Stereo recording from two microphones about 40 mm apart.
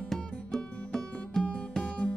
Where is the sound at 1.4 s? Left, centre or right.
Left.